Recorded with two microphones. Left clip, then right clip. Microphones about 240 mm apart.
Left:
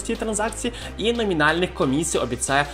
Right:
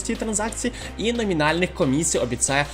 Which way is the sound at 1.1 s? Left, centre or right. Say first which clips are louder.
Left 1 dB; right.